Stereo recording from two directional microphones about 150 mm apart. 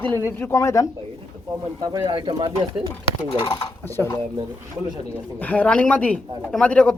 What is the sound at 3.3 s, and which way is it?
Speech, 35° left (ahead or behind).